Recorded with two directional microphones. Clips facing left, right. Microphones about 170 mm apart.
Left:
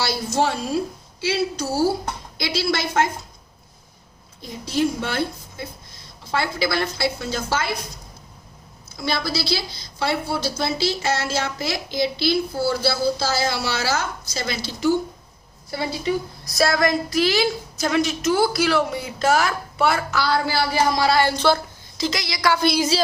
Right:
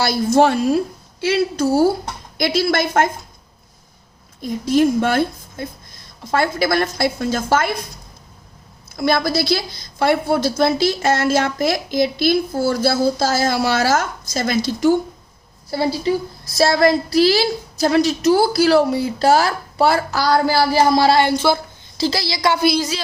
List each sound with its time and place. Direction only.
0.0 s a woman's voice: 55° right (ahead or behind)
4.6 s a woman's voice: 50° right (ahead or behind)
9.0 s a woman's voice: 50° right (ahead or behind)
15.7 s a woman's voice: 35° right (ahead or behind)
21.2 s a woman's voice: 10° right (ahead or behind)
21.9 s a woman's voice: 30° right (ahead or behind)